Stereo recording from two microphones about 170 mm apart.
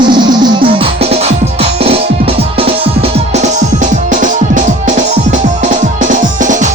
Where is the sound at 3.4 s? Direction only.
45° right (ahead or behind).